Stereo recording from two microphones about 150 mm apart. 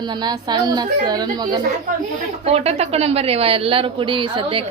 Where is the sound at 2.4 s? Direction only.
45° right (ahead or behind).